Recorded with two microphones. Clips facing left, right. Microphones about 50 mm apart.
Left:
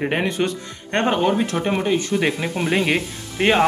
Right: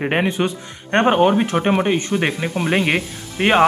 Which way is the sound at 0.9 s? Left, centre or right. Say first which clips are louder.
Right 4 dB; right.